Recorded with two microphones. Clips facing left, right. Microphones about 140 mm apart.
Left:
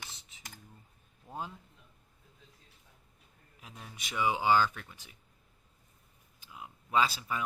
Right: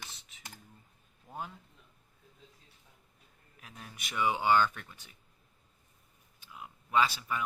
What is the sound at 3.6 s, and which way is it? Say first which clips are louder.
Speech: even; 25° left (ahead or behind).